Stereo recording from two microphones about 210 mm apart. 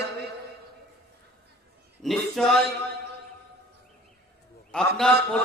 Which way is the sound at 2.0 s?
Centre (ahead or behind).